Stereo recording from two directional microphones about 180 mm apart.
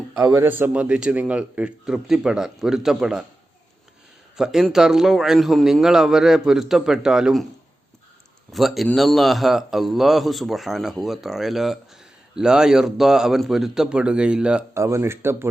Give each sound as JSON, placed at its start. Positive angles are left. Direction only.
{"t": 0.2, "sound": "a man's voice", "side_deg": -20}
{"t": 0.4, "sound": "a man's voice", "side_deg": -10}
{"t": 4.4, "sound": "a man's voice", "side_deg": -5}
{"t": 8.5, "sound": "a man's voice", "side_deg": 0}